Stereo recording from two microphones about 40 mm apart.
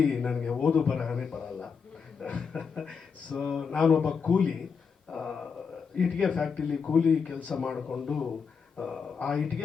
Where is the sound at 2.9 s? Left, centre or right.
Left.